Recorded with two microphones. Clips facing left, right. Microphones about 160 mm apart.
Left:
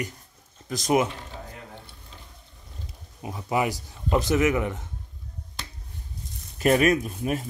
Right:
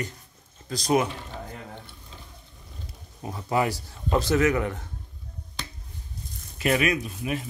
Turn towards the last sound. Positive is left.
turn(degrees=45)  # may be behind; listen again after turning